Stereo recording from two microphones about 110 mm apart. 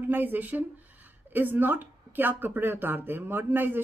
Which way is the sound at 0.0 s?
20° right (ahead or behind).